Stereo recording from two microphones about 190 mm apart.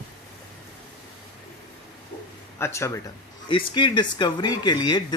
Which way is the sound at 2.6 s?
15° left (ahead or behind).